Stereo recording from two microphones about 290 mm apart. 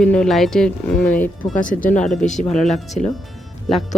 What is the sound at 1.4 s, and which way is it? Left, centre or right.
Speech, left.